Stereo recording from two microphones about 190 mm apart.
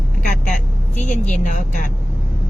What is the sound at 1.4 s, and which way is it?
Speech, 40° left (ahead or behind).